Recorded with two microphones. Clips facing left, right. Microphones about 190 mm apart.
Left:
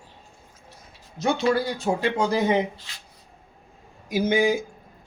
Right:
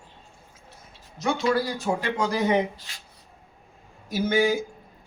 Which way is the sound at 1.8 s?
25° left (ahead or behind).